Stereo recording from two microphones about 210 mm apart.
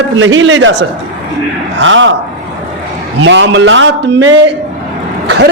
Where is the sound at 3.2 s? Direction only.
60° right (ahead or behind).